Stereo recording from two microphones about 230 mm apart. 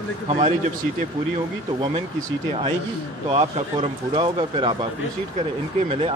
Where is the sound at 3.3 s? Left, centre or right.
Right.